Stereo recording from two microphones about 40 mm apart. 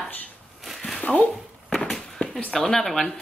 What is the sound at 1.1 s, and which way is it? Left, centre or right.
Speech, centre.